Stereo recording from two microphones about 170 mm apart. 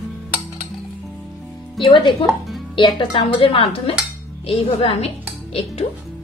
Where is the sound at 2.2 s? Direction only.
Centre (ahead or behind).